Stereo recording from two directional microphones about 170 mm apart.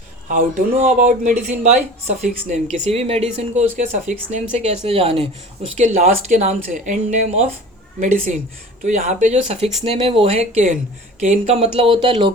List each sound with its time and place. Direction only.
0.3 s speech: 50° right (ahead or behind); by 12.3 s 30° right (ahead or behind)